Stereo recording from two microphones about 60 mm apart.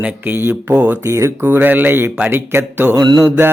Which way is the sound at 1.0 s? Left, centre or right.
Right.